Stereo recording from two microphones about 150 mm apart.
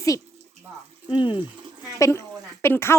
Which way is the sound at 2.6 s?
15° left (ahead or behind).